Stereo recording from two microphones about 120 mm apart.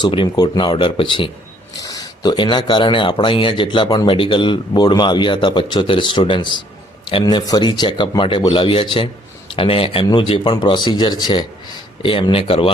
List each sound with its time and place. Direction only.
0.0 s speech: 45° left (ahead or behind)
1.8 s speech: 30° left (ahead or behind)
12.0 s speech: 50° left (ahead or behind)